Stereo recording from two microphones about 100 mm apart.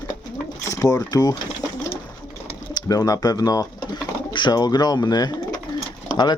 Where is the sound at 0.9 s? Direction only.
40° left (ahead or behind).